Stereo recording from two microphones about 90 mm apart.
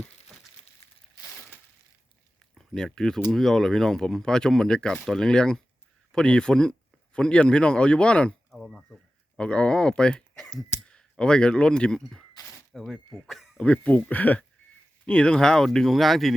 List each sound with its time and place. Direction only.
2.6 s speech: 5° left (ahead or behind)
13.6 s speech: 15° left (ahead or behind)